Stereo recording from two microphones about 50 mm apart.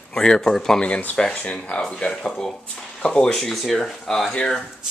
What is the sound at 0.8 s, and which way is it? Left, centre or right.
Speech, left.